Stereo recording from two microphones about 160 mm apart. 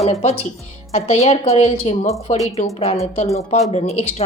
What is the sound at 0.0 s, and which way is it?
A woman's voice, 40° left (ahead or behind).